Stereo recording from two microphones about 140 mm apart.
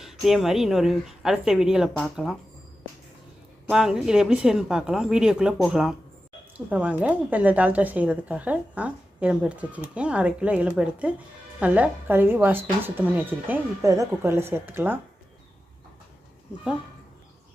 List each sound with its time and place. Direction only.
0.0 s a woman's voice: centre (ahead or behind)
3.7 s a woman's voice: 5° right (ahead or behind)